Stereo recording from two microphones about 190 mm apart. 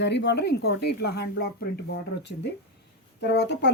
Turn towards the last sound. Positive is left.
turn(degrees=65)  # may be behind; listen again after turning